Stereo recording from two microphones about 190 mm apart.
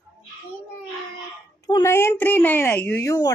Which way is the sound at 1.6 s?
15° left (ahead or behind).